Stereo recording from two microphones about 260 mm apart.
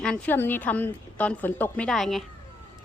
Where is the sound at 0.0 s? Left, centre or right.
Centre.